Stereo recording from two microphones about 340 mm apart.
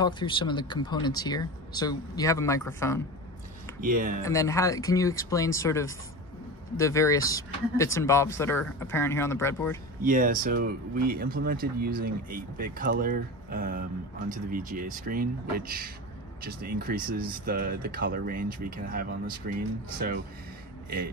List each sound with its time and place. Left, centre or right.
0.0 s speech: centre
3.8 s speech: right
4.2 s speech: centre
10.0 s speech: right